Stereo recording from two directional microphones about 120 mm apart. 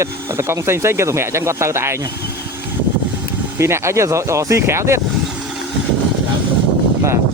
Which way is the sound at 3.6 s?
20° right (ahead or behind).